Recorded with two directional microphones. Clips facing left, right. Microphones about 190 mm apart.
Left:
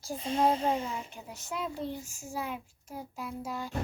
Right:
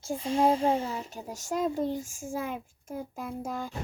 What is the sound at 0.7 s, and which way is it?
Speech, 35° right (ahead or behind).